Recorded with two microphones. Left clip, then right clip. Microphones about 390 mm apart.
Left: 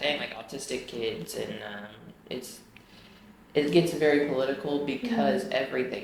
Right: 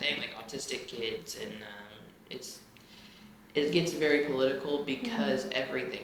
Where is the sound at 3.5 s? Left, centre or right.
Left.